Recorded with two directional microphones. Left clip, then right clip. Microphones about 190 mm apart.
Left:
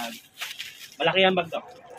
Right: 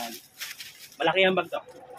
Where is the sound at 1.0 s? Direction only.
10° right (ahead or behind).